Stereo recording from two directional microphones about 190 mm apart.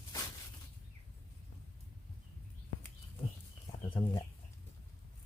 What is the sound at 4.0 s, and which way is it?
Chicken, 25° left (ahead or behind).